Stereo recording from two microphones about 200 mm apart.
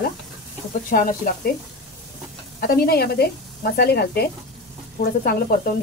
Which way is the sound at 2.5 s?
45° left (ahead or behind).